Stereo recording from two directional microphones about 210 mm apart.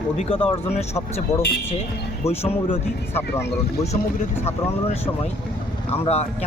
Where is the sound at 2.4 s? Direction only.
30° left (ahead or behind).